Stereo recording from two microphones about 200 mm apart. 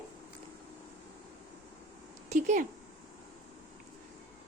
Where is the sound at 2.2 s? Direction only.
35° right (ahead or behind).